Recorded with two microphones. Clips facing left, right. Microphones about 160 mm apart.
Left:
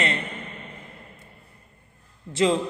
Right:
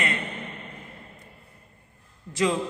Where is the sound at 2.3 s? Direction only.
25° left (ahead or behind).